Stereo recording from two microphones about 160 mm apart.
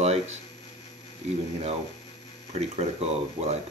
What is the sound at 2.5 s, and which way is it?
Speech, 40° right (ahead or behind).